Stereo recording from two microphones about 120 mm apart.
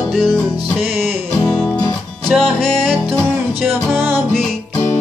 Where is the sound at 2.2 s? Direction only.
5° left (ahead or behind).